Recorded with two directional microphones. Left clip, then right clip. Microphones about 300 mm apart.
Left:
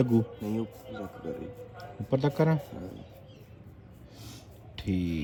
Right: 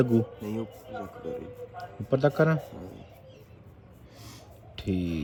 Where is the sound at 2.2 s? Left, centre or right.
Centre.